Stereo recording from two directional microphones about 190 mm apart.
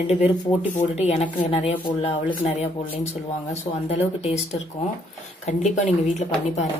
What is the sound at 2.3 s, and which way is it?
Speech, 40° left (ahead or behind).